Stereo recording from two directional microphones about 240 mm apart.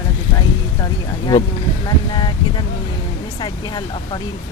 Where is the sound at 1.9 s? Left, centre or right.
Centre.